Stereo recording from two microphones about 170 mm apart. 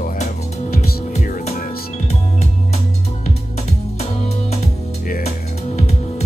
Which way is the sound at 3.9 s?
40° left (ahead or behind).